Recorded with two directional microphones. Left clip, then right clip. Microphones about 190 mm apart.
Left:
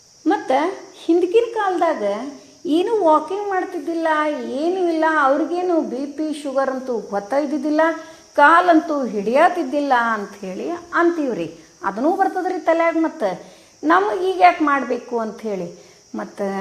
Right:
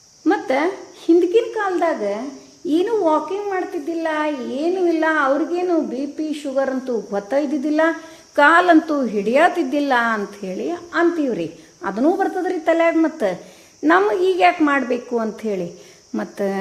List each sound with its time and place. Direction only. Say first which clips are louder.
0.3 s a woman's voice: even; 15° right (ahead or behind)
2.6 s a woman's voice: left 2 dB; centre (ahead or behind); by 16.6 s 30° right (ahead or behind)